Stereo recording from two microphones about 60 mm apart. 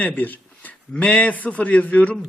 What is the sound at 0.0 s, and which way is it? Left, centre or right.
A man's voice, left.